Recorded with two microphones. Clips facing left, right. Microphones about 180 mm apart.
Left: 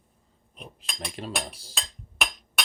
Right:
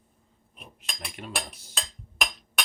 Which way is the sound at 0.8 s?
35° left (ahead or behind).